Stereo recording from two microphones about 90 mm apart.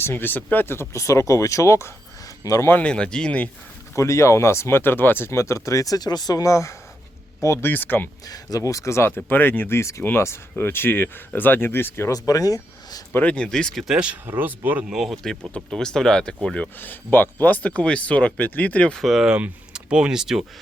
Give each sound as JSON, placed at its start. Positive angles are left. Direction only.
{"t": 0.0, "sound": "speech", "side_deg": 25}
{"t": 2.6, "sound": "speech", "side_deg": 15}
{"t": 3.9, "sound": "speech", "side_deg": 35}
{"t": 7.7, "sound": "speech", "side_deg": 20}
{"t": 8.3, "sound": "speech", "side_deg": 40}
{"t": 12.1, "sound": "speech", "side_deg": 40}
{"t": 13.1, "sound": "speech", "side_deg": 15}
{"t": 13.8, "sound": "speech", "side_deg": -10}
{"t": 14.3, "sound": "speech", "side_deg": -20}
{"t": 14.8, "sound": "speech", "side_deg": -5}
{"t": 16.8, "sound": "speech", "side_deg": 20}
{"t": 18.9, "sound": "speech", "side_deg": 0}